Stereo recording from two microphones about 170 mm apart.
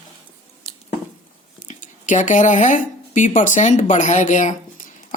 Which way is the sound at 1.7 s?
50° left (ahead or behind).